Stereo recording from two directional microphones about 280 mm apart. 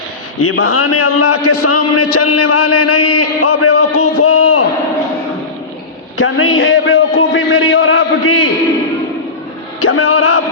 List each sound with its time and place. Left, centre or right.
0.3 s a man's voice: left
6.1 s a sound: left
9.8 s music: left